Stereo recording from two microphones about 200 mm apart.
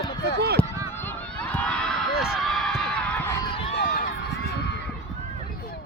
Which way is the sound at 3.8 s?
40° left (ahead or behind).